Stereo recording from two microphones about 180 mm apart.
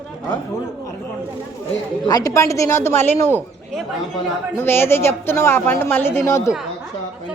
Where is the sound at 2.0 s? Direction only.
20° left (ahead or behind).